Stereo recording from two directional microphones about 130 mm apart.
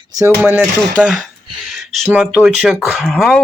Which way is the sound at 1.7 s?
Centre (ahead or behind).